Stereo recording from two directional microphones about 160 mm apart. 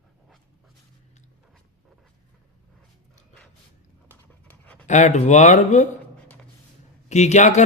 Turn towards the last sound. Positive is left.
turn(degrees=45)  # may be behind; listen again after turning